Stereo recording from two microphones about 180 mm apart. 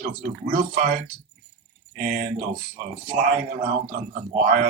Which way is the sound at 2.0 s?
50° right (ahead or behind).